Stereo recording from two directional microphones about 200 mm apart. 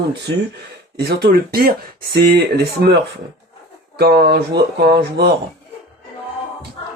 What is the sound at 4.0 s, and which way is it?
Speech, 50° right (ahead or behind).